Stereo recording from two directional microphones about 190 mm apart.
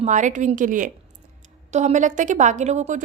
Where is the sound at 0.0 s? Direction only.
40° right (ahead or behind).